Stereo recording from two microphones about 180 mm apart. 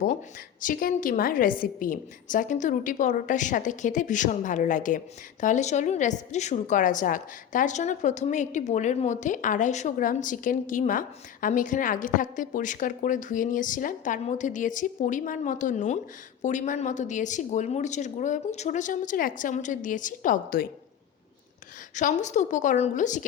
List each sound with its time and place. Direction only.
0.6 s a woman's voice: 50° left (ahead or behind)
21.9 s a woman's voice: 40° left (ahead or behind)